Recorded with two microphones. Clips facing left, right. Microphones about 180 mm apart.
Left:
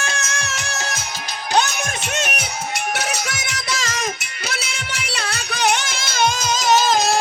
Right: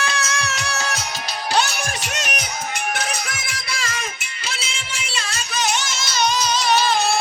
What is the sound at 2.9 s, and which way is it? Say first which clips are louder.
Music: left 2 dB; 75° left (ahead or behind).